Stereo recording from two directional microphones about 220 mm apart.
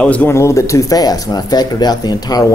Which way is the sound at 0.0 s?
5° left (ahead or behind).